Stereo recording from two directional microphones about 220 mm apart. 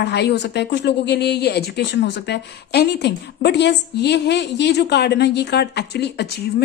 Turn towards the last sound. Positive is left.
turn(degrees=50)  # may be behind; listen again after turning